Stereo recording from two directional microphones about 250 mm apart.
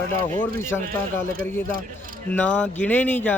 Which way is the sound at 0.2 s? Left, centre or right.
Centre.